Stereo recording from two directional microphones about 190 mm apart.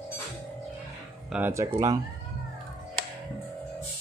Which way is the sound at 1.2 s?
5° right (ahead or behind).